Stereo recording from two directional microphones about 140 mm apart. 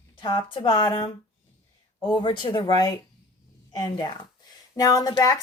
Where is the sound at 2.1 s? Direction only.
35° left (ahead or behind).